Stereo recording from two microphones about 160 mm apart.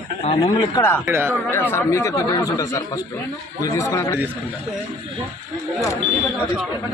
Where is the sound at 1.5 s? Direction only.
15° left (ahead or behind).